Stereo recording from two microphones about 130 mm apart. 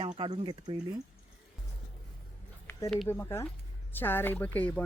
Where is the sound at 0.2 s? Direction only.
45° right (ahead or behind).